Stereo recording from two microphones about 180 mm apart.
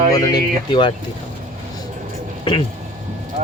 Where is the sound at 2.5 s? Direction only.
25° left (ahead or behind).